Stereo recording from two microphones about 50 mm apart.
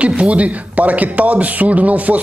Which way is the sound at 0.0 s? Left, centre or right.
Right.